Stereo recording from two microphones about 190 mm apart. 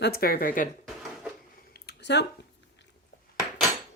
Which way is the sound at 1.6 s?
55° left (ahead or behind).